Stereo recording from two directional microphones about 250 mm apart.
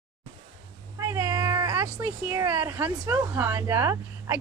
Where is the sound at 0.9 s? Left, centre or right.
Centre.